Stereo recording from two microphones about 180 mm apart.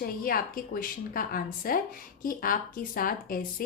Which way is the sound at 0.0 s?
55° left (ahead or behind).